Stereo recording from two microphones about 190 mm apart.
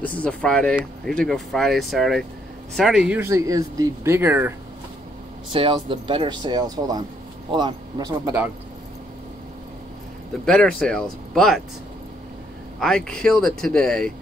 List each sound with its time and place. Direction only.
0.0 s speech: 5° left (ahead or behind); by 4.6 s 10° right (ahead or behind)
5.5 s speech: 25° right (ahead or behind)
10.4 s speech: 5° left (ahead or behind)
12.8 s speech: 5° left (ahead or behind)